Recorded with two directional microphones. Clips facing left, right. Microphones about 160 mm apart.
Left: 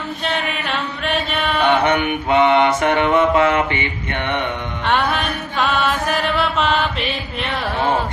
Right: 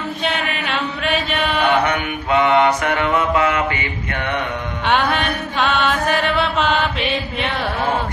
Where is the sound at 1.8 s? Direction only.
25° left (ahead or behind).